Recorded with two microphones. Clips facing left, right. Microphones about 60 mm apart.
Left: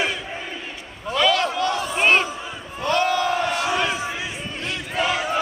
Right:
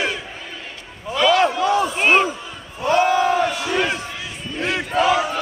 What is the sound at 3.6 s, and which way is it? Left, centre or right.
Battle cry, centre.